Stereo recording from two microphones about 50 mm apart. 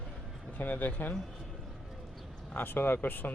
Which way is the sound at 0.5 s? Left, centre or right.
Left.